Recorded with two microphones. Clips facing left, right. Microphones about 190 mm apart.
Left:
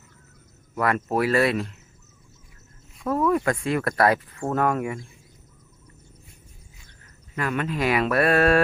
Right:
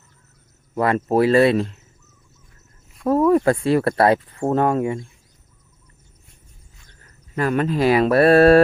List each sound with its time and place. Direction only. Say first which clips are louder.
0.8 s speech: right 6 dB; 25° right (ahead or behind)
3.1 s speech: right 6 dB; 30° right (ahead or behind)
7.3 s speech: right 6 dB; 35° right (ahead or behind)